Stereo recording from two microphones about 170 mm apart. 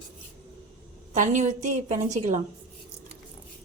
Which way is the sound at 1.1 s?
45° right (ahead or behind).